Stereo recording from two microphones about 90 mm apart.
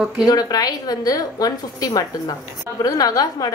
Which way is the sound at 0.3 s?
45° left (ahead or behind).